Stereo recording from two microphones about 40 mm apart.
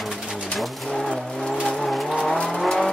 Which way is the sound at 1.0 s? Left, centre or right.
Centre.